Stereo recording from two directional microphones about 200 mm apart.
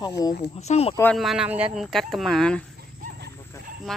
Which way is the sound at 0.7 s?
30° left (ahead or behind).